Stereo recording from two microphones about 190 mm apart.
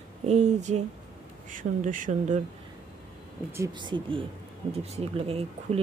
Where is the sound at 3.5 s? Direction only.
20° right (ahead or behind).